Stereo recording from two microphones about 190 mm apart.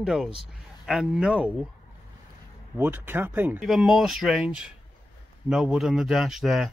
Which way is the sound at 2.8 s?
10° right (ahead or behind).